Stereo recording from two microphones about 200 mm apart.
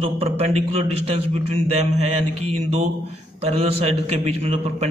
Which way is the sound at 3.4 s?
30° right (ahead or behind).